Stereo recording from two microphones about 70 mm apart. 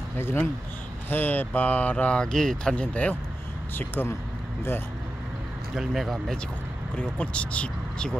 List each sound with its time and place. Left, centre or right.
0.2 s speech: left
3.7 s speech: left
5.8 s speech: centre
7.0 s speech: centre